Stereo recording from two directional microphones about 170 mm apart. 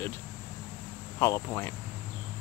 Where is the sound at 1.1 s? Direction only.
15° left (ahead or behind).